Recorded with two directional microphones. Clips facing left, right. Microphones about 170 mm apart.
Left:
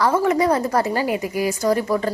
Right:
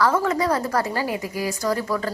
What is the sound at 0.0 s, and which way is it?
A woman's voice, 20° left (ahead or behind).